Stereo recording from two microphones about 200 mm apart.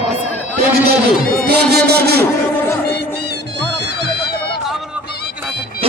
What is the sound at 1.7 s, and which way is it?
Speech, 55° right (ahead or behind).